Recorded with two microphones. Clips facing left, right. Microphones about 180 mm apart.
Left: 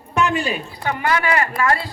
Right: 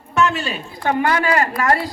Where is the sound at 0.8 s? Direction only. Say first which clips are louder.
Right 4 dB; 50° right (ahead or behind).